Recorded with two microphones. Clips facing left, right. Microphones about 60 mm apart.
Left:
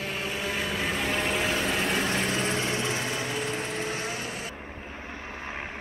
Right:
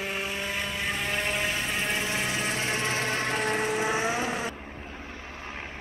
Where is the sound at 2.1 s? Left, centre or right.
Centre; by 3.5 s right.